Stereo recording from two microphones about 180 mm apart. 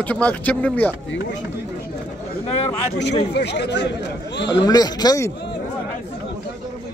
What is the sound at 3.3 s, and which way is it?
Speech, 70° left (ahead or behind).